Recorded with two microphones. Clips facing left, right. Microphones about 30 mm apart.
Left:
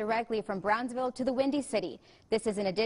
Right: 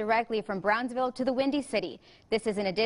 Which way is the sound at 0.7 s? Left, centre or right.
Right.